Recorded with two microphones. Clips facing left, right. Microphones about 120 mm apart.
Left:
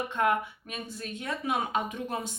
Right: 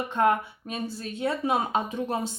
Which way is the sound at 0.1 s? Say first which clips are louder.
Right 5 dB; 35° right (ahead or behind).